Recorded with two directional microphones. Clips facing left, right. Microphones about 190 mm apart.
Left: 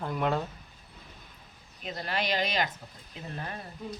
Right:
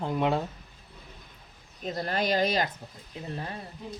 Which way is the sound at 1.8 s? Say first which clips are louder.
Right 4 dB; 40° right (ahead or behind).